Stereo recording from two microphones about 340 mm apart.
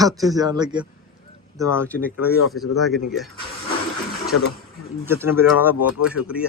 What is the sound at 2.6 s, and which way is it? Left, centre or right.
Speech, centre.